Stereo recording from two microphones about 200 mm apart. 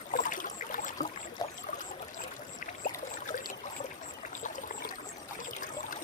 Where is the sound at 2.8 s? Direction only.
40° left (ahead or behind).